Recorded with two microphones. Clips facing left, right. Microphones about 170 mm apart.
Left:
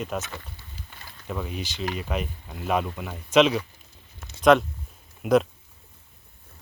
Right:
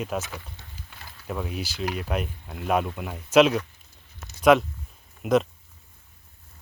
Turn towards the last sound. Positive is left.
turn(degrees=0)  # may be behind; listen again after turning